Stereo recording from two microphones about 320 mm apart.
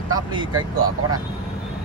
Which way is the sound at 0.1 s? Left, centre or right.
Centre.